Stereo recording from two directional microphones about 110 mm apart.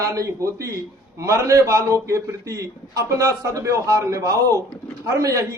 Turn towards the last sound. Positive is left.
turn(degrees=-30)  # may be behind; listen again after turning